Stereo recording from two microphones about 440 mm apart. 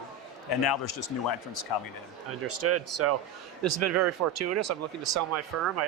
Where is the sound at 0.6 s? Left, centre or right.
Left.